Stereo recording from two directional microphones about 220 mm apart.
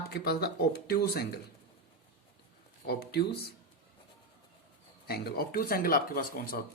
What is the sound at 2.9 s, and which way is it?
Speech, 45° left (ahead or behind).